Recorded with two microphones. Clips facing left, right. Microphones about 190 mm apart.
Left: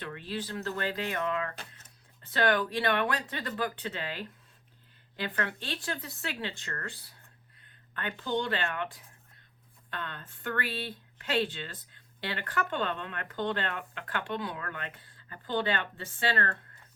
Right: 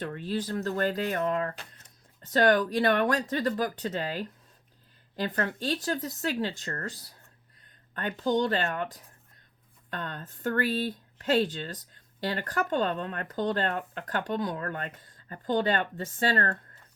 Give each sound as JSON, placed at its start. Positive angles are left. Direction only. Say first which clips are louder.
{"t": 0.0, "sound": "speech", "louder": "right 5 dB", "side_deg": -40}